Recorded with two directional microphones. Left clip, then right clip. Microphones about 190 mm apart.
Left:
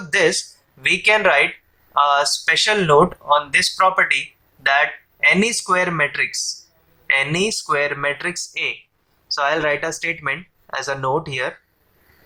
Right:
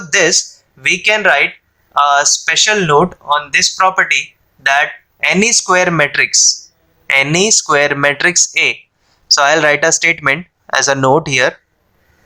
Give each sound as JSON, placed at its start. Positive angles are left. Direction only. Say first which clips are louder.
{"t": 0.1, "sound": "speech", "louder": "right 6 dB", "side_deg": -25}